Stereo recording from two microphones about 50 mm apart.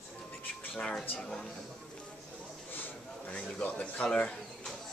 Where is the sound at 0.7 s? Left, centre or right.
Centre.